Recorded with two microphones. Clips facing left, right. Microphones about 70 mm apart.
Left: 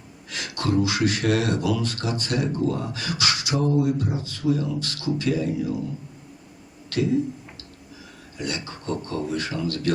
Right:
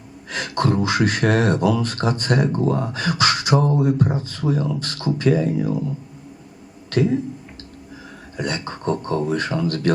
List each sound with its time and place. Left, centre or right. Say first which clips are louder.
0.3 s speech: right 5 dB; right
8.4 s speech: right 5 dB; right